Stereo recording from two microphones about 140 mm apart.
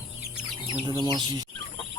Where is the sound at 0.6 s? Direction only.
35° right (ahead or behind).